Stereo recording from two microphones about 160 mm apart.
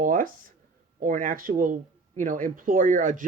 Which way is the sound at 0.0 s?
55° right (ahead or behind).